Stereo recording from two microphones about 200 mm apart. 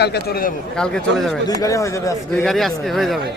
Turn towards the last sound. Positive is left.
turn(degrees=0)  # may be behind; listen again after turning